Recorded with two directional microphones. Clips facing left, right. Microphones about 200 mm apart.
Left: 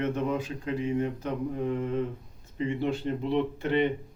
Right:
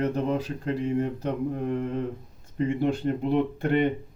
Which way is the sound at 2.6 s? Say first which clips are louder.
Right 4 dB; 50° right (ahead or behind).